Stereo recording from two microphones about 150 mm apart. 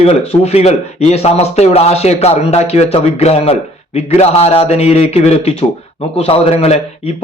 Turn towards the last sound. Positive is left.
turn(degrees=45)  # may be behind; listen again after turning